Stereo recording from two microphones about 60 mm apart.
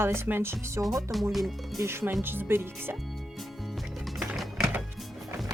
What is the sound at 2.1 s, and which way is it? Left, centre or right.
Speech, right.